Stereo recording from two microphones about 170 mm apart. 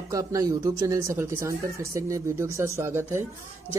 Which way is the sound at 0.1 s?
20° right (ahead or behind).